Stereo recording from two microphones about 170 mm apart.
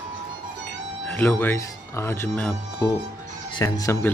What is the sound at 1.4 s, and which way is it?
Speech, 15° left (ahead or behind).